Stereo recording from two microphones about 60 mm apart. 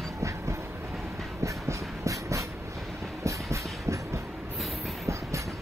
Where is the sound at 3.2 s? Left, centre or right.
Right.